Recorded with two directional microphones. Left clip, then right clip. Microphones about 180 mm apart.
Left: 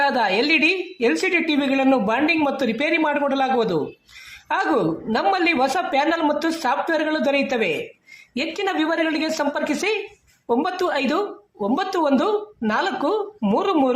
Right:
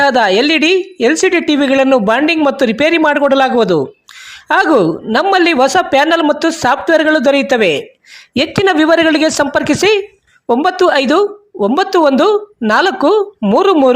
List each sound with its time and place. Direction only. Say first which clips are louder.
0.0 s a woman's voice: right 9 dB; 45° right (ahead or behind)